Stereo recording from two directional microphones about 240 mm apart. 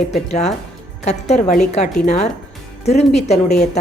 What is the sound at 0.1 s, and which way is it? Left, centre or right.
A woman's voice, left.